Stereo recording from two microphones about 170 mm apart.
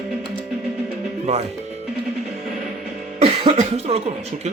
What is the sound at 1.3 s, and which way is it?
Speech, 40° right (ahead or behind).